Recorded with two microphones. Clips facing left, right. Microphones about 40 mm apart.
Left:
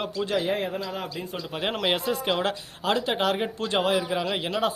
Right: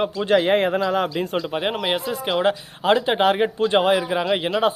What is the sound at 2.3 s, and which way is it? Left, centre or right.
Speech, right.